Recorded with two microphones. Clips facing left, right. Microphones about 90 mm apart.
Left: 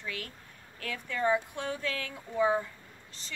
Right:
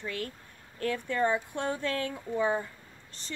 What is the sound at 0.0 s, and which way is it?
A woman's voice, 40° right (ahead or behind).